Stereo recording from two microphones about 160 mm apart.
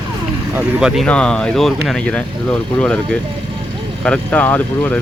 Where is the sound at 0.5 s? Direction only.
5° right (ahead or behind).